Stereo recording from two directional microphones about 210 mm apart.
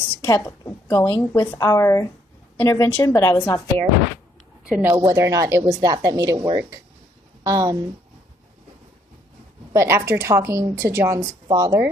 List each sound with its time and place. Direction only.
0.1 s a woman's voice: 15° left (ahead or behind)
4.7 s a woman's voice: 10° right (ahead or behind)
9.7 s a woman's voice: 15° right (ahead or behind)